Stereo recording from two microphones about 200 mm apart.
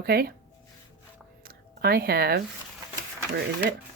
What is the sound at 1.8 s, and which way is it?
Speech, 50° right (ahead or behind).